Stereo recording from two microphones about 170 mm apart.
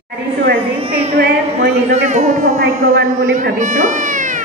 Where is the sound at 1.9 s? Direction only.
45° right (ahead or behind).